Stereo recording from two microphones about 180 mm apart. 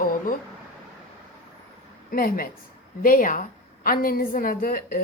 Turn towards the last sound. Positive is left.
turn(degrees=55)  # may be behind; listen again after turning